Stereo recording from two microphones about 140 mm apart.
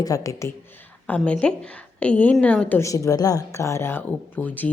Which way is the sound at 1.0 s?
10° left (ahead or behind).